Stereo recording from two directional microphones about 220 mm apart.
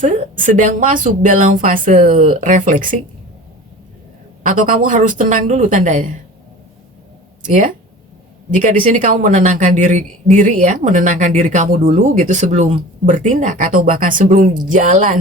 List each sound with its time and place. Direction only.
0.0 s speech: 35° right (ahead or behind)
4.4 s speech: 35° right (ahead or behind)
7.4 s speech: 35° right (ahead or behind)